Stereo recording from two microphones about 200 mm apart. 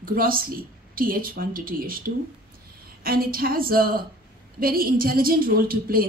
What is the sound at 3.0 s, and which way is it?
Speech, 50° right (ahead or behind).